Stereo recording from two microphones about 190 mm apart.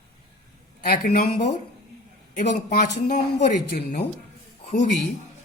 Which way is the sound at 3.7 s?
55° left (ahead or behind).